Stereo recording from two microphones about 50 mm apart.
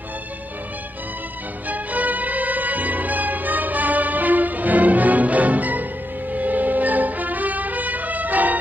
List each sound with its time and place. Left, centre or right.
1.7 s music: right